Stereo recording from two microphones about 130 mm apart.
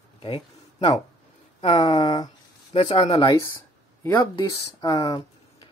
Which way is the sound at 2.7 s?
55° left (ahead or behind).